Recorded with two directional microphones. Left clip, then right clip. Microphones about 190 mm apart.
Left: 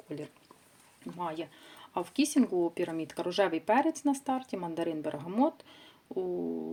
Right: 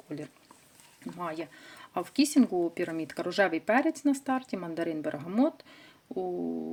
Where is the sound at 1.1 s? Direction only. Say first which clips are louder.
Even; 15° right (ahead or behind).